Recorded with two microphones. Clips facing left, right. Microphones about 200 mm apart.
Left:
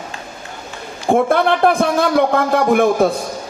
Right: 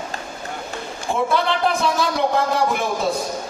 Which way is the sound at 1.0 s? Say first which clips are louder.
Left 7 dB; 55° left (ahead or behind).